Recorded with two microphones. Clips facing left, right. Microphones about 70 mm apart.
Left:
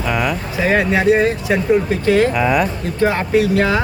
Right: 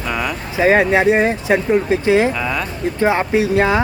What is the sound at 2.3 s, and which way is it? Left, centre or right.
Speech, centre.